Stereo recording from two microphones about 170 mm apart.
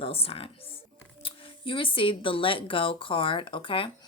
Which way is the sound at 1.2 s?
30° left (ahead or behind).